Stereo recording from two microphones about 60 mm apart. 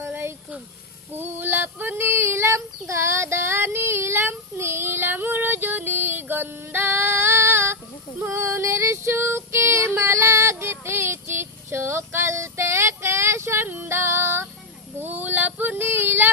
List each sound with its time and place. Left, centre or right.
0.1 s a sound: right
1.1 s female singing: right
8.5 s female singing: right
15.0 s female singing: right